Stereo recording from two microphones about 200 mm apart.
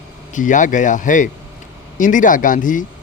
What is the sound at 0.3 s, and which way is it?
Speech, 40° left (ahead or behind).